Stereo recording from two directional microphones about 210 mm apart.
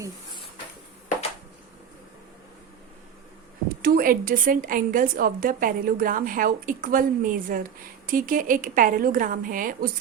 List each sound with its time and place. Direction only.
3.8 s a woman's voice: 45° right (ahead or behind)